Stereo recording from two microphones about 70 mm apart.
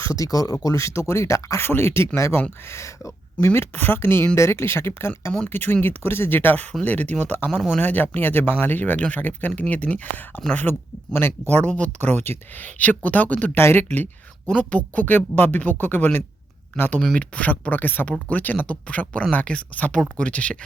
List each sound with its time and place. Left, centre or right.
0.0 s speech: left
13.6 s speech: left
17.2 s speech: centre